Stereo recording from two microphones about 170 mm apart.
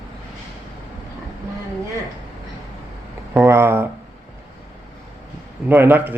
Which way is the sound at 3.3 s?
15° right (ahead or behind).